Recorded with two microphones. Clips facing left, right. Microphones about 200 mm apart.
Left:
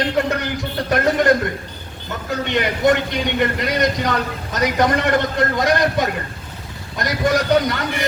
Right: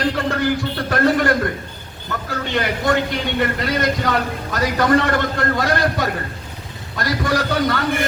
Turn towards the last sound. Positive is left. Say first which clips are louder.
# left 2 dB
turn(degrees=20)  # may be behind; listen again after turning